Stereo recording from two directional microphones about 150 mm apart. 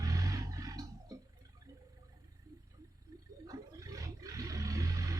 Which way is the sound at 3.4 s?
25° right (ahead or behind).